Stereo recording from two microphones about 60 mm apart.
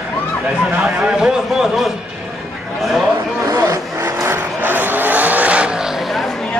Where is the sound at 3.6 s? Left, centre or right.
Right.